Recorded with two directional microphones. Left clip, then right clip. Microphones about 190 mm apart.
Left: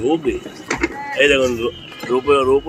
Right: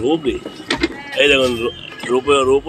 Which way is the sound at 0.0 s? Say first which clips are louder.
Right 1 dB; centre (ahead or behind).